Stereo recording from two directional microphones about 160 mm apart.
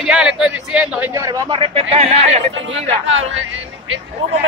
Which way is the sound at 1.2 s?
20° right (ahead or behind).